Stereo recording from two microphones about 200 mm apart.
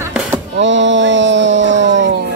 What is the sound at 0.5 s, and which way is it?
Speech, 65° right (ahead or behind).